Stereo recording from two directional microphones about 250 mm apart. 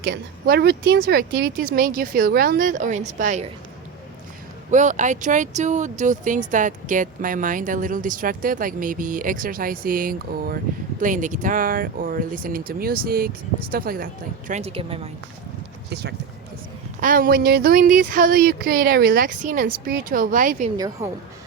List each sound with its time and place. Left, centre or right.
0.0 s speech: right
4.7 s speech: right
15.9 s speech: right
20.7 s a woman's voice: centre